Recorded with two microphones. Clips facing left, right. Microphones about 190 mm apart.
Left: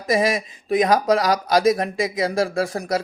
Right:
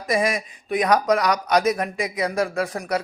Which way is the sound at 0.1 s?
25° left (ahead or behind).